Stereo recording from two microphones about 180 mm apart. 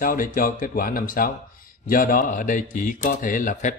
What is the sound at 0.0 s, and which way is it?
Speech, 50° left (ahead or behind).